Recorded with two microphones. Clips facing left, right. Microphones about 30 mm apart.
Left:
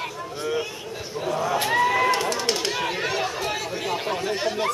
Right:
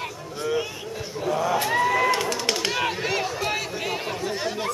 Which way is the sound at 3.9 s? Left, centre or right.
Centre.